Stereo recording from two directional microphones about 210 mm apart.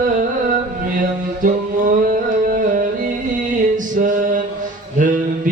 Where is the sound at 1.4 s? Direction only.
40° right (ahead or behind).